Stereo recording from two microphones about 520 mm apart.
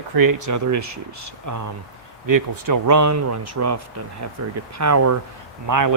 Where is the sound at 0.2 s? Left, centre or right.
Right.